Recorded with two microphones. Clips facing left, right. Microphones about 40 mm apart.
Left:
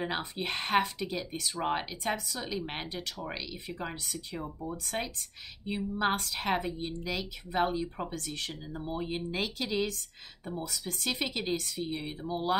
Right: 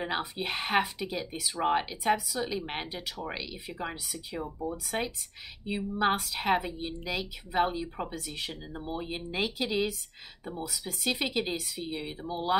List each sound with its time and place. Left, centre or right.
0.0 s speech: centre